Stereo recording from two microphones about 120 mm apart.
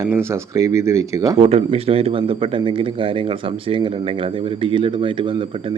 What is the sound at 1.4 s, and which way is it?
Speech, 60° right (ahead or behind).